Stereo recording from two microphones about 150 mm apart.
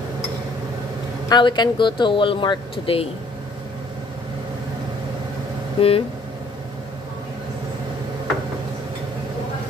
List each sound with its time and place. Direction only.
1.3 s speech: 30° left (ahead or behind)
5.8 s speech: 40° left (ahead or behind)